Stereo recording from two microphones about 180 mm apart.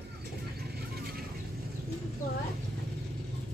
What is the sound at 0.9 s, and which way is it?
Vehicle, 60° right (ahead or behind).